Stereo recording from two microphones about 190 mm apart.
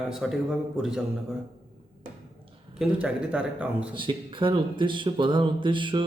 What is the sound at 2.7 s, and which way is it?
Speech, 5° right (ahead or behind).